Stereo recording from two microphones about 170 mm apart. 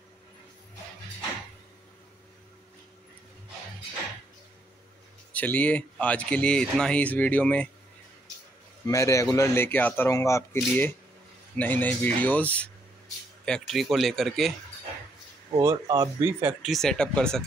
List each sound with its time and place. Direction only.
5.3 s speech: 10° left (ahead or behind)
8.8 s speech: 20° left (ahead or behind); by 14.5 s centre (ahead or behind)
15.6 s speech: 20° right (ahead or behind)
16.7 s speech: 5° left (ahead or behind)